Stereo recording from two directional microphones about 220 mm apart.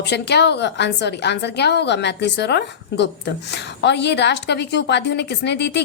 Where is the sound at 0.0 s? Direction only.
50° left (ahead or behind).